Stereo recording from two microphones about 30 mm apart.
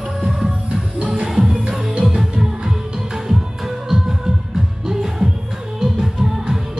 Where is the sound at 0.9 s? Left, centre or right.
Right.